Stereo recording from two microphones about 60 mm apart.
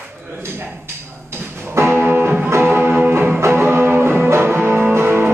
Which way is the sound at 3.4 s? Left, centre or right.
Right.